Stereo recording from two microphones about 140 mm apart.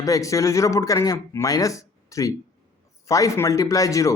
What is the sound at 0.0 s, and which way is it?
Speech, 25° left (ahead or behind).